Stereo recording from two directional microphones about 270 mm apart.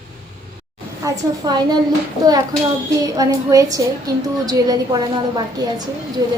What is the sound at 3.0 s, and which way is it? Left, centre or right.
A woman's voice, centre.